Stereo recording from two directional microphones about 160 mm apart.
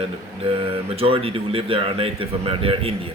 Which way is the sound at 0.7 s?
35° right (ahead or behind).